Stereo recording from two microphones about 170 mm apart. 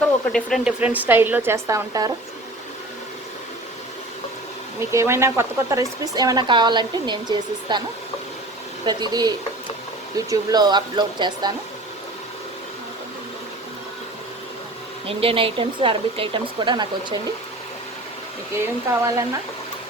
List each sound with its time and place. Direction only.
0.0 s speech: 5° left (ahead or behind)
0.8 s a woman's voice: 10° right (ahead or behind)
4.8 s speech: 15° right (ahead or behind)
8.8 s speech: 25° right (ahead or behind)
15.0 s speech: 35° right (ahead or behind)
18.5 s a woman's voice: 15° right (ahead or behind)